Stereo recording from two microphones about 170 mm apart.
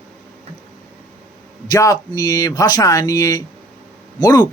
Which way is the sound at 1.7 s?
20° left (ahead or behind).